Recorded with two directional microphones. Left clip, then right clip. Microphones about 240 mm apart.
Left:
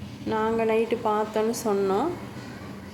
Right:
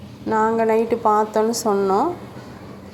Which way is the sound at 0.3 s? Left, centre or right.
Centre.